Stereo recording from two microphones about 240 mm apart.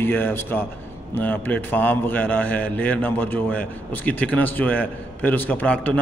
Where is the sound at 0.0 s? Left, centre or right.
Centre.